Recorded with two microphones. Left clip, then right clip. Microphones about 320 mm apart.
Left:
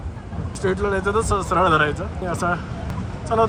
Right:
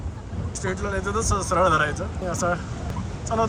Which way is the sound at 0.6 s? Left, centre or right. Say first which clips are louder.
Left 6 dB; centre.